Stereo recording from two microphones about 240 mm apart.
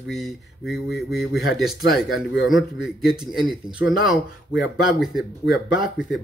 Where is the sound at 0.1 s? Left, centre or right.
Centre.